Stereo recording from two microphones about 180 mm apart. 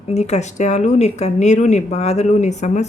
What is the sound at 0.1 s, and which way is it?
A woman's voice, 40° left (ahead or behind).